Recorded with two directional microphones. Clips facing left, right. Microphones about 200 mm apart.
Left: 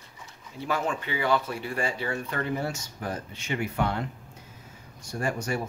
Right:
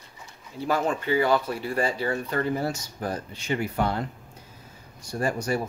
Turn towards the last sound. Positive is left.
turn(degrees=-35)  # may be behind; listen again after turning